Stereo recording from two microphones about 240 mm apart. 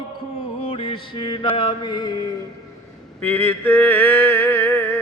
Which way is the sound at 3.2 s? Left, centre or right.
Centre.